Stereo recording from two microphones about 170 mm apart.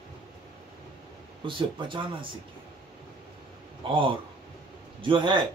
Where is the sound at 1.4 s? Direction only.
30° right (ahead or behind).